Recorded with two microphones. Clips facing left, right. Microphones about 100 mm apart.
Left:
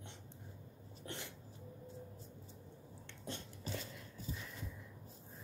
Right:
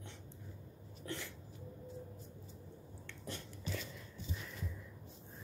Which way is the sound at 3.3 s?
35° left (ahead or behind).